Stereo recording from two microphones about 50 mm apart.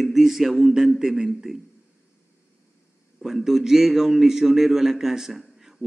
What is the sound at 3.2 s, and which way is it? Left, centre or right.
A man's voice, centre.